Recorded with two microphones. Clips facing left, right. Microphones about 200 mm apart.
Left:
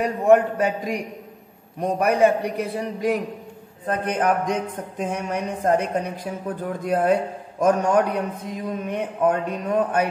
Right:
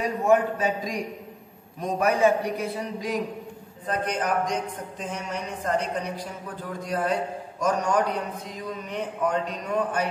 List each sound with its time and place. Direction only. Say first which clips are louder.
0.0 s speech: left 5 dB; 60° left (ahead or behind)